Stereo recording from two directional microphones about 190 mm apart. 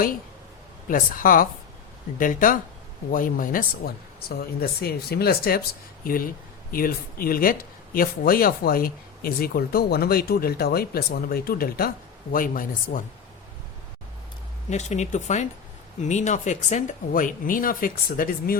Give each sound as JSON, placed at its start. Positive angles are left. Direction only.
{"t": 0.9, "sound": "speech", "side_deg": 45}
{"t": 14.7, "sound": "speech", "side_deg": 40}